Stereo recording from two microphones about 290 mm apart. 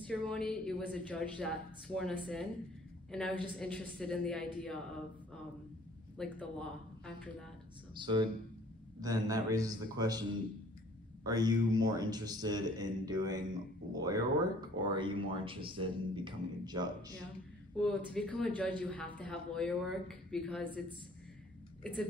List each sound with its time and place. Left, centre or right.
0.0 s a woman's voice: centre
6.1 s a woman's voice: centre
7.9 s speech: centre
11.2 s speech: centre
17.7 s a woman's voice: centre